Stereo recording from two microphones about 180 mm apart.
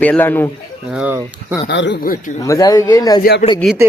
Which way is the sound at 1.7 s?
75° left (ahead or behind).